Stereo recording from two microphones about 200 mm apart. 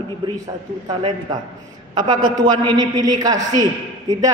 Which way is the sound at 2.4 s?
20° right (ahead or behind).